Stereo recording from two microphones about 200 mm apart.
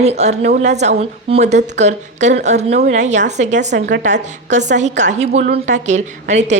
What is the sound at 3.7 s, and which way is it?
Speech, 60° right (ahead or behind).